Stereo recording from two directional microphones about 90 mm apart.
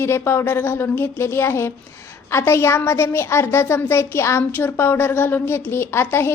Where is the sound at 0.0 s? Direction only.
30° left (ahead or behind).